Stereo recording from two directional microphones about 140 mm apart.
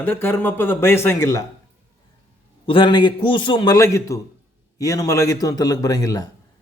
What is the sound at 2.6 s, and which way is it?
A man's voice, 35° left (ahead or behind).